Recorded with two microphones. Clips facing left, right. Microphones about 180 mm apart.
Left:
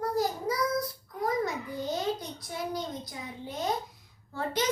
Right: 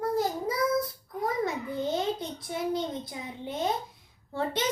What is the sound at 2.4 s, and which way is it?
A child's voice, 25° right (ahead or behind).